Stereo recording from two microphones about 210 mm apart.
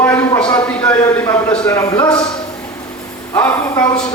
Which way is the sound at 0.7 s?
5° left (ahead or behind).